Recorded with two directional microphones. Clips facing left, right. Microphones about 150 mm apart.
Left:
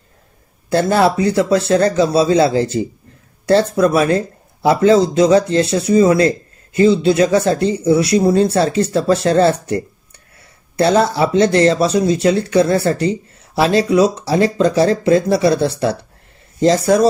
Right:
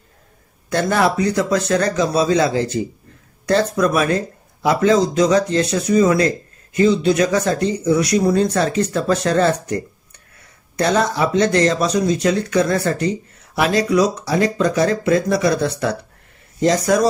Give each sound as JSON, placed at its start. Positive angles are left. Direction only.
{"t": 0.7, "sound": "speech", "side_deg": 30}